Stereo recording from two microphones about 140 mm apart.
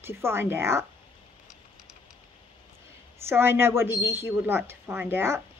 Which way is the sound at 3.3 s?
15° right (ahead or behind).